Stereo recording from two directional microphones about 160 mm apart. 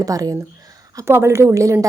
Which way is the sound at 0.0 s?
20° right (ahead or behind).